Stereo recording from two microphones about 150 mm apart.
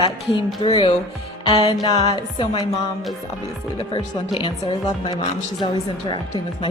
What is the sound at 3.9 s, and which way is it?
Speech, 35° left (ahead or behind).